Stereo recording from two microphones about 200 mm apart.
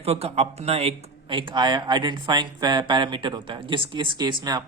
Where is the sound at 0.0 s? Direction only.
30° right (ahead or behind).